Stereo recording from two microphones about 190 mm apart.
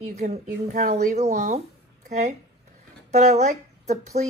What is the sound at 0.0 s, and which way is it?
Speech, 35° right (ahead or behind).